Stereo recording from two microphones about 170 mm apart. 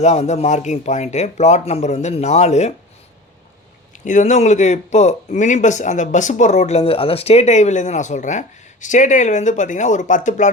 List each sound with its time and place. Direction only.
0.0 s speech: 40° left (ahead or behind)
4.0 s speech: 45° left (ahead or behind)